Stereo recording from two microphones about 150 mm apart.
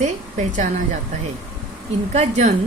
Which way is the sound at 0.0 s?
55° right (ahead or behind).